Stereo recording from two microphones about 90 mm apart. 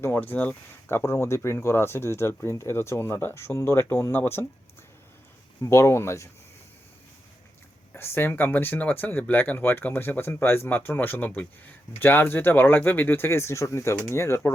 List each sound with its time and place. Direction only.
0.0 s speech: 20° left (ahead or behind)
5.6 s speech: 35° left (ahead or behind)
7.9 s speech: 25° left (ahead or behind)